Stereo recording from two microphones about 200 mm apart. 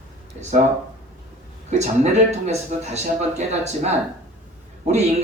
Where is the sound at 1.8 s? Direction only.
35° right (ahead or behind).